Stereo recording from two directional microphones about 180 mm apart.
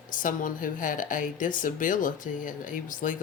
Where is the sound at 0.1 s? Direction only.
50° left (ahead or behind).